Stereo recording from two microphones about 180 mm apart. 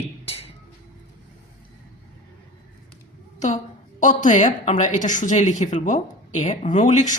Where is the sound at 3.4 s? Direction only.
40° left (ahead or behind).